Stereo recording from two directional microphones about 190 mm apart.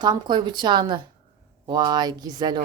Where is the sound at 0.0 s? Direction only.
25° right (ahead or behind).